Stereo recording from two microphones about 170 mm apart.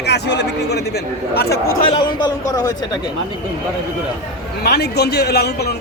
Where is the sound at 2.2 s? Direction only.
25° left (ahead or behind).